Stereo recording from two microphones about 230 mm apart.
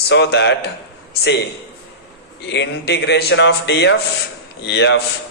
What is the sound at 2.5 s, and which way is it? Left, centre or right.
A man's voice, left.